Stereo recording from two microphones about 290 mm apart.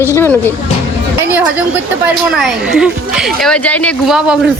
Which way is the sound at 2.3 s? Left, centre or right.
Centre.